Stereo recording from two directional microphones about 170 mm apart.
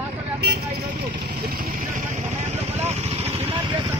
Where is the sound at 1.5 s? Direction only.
45° right (ahead or behind).